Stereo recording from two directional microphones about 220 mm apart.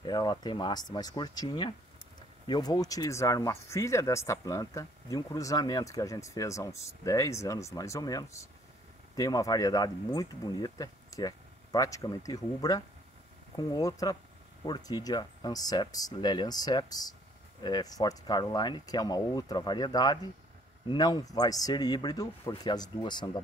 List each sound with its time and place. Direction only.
0.0 s speech: 20° left (ahead or behind)